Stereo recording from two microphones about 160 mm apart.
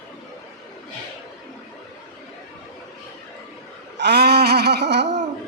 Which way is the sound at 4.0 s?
90° right.